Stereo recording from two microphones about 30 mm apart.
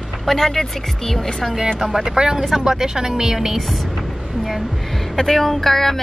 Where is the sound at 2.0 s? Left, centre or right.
Right; by 3.8 s centre.